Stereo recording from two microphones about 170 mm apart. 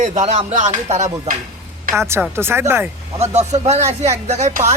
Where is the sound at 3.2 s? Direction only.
40° right (ahead or behind).